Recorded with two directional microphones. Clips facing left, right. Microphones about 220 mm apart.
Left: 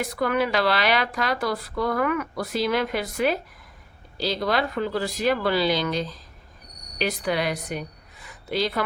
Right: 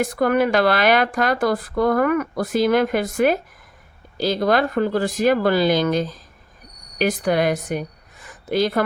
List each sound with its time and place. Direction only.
0.0 s a woman's voice: 50° right (ahead or behind)